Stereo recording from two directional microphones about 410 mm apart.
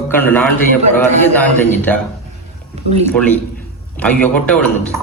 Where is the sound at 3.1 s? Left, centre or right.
Centre.